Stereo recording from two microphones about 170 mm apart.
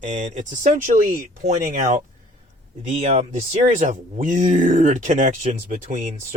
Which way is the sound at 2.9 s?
35° right (ahead or behind).